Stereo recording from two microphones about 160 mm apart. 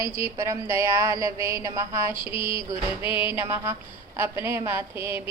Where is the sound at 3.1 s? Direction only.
15° right (ahead or behind).